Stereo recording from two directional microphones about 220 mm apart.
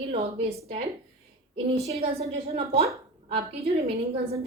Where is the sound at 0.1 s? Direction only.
25° right (ahead or behind).